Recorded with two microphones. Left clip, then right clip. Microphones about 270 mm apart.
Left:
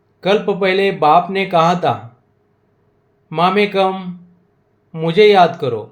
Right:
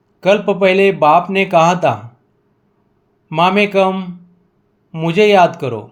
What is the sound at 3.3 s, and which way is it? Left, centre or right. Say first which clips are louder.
Speech: right 1 dB; right.